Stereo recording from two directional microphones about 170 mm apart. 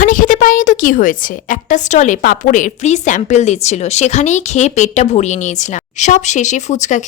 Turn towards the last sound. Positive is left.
turn(degrees=45)  # may be behind; listen again after turning